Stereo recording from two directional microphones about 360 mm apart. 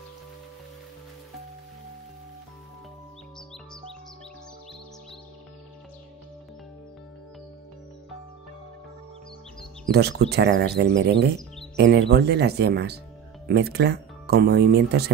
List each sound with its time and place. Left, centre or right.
9.8 s speech: right